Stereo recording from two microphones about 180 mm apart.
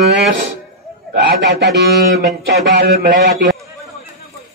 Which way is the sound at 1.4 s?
75° right (ahead or behind).